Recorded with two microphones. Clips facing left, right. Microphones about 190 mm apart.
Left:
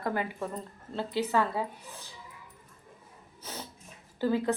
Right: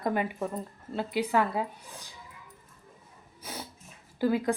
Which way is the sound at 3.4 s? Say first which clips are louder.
Right 1 dB; 10° right (ahead or behind).